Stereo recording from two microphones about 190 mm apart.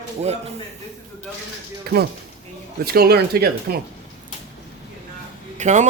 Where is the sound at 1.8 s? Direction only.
55° right (ahead or behind).